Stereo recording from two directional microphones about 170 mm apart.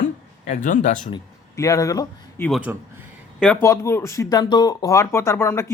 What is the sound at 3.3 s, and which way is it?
Speech, 5° left (ahead or behind).